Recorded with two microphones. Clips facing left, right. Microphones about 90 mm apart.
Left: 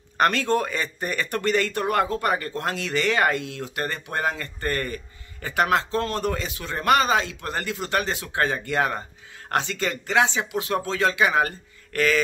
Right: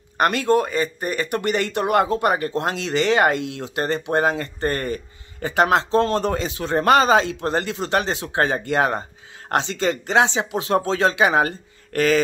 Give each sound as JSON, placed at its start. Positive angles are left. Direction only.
{"t": 0.2, "sound": "speech", "side_deg": -10}